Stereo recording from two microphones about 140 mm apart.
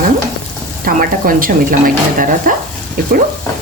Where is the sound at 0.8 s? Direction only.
90° right.